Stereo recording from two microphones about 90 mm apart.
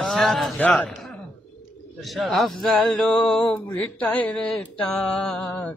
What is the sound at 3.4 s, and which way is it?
Mantra, 15° left (ahead or behind).